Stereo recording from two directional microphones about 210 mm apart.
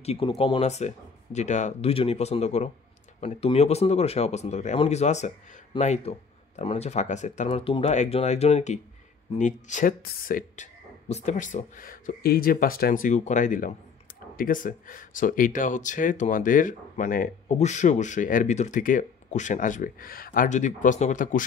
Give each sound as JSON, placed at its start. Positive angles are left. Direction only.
{"t": 0.0, "sound": "speech", "side_deg": 30}